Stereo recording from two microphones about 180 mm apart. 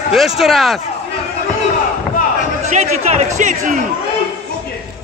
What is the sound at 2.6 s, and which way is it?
A man's voice, 40° right (ahead or behind).